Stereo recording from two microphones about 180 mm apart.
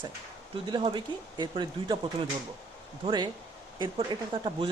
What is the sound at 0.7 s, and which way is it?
Speech, 25° right (ahead or behind).